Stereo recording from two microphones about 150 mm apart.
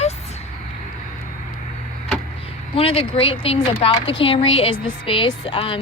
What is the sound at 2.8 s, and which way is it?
Speech, 40° left (ahead or behind).